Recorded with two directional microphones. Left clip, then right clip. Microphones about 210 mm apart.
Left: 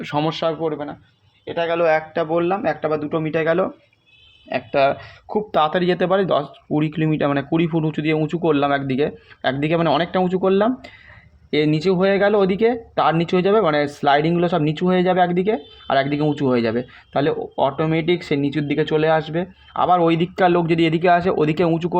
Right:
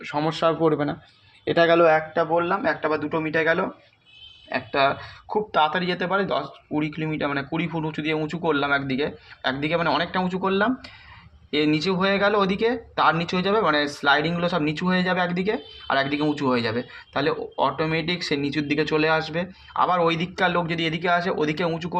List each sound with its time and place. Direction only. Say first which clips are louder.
0.3 s speech: right 2 dB; 15° left (ahead or behind)
0.6 s speech: right 3 dB; 30° right (ahead or behind)
1.8 s speech: even; centre (ahead or behind)
2.3 s speech: left 4 dB; 45° left (ahead or behind)